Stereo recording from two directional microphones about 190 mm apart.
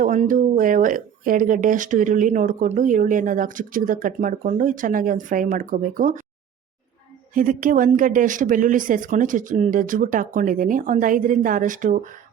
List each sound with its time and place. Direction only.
0.0 s speech: 45° right (ahead or behind)
7.3 s speech: 45° right (ahead or behind)